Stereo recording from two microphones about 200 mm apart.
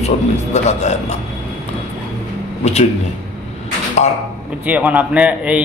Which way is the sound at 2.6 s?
35° left (ahead or behind).